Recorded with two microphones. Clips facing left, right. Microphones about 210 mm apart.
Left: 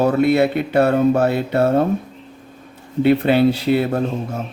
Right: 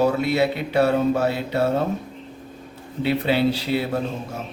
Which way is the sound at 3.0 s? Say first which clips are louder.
Left 6 dB; 55° left (ahead or behind).